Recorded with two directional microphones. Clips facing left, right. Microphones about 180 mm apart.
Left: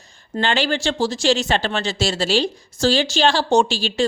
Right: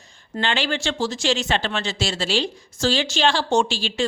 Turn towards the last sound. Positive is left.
turn(degrees=40)  # may be behind; listen again after turning